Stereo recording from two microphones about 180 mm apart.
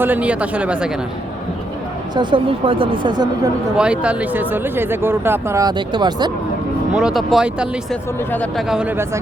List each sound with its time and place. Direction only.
0.0 s speech: 10° right (ahead or behind)
2.1 s a woman's voice: 30° right (ahead or behind)
3.8 s speech: 5° right (ahead or behind); by 6.3 s 25° right (ahead or behind)
6.9 s speech: centre (ahead or behind)
8.3 s speech: 10° left (ahead or behind)
8.7 s speech: 5° right (ahead or behind)